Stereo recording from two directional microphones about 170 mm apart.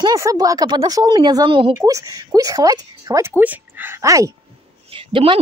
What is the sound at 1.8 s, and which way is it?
Speech, 20° right (ahead or behind).